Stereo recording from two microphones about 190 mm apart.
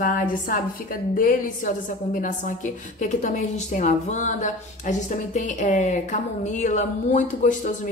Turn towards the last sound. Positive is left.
turn(degrees=40)  # may be behind; listen again after turning